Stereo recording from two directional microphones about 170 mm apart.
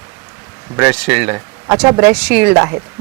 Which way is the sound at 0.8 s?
5° right (ahead or behind).